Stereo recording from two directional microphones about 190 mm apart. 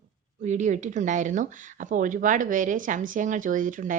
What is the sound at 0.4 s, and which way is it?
Speech, 40° right (ahead or behind).